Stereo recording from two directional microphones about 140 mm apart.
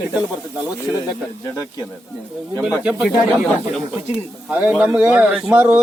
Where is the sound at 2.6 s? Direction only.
5° right (ahead or behind).